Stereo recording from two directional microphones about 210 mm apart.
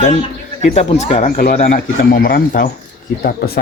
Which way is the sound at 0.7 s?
30° left (ahead or behind).